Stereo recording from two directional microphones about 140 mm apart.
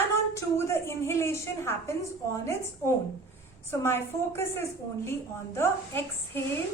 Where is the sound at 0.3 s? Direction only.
20° left (ahead or behind).